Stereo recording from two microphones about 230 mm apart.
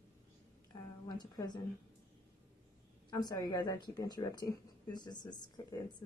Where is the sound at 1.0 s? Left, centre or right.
Centre.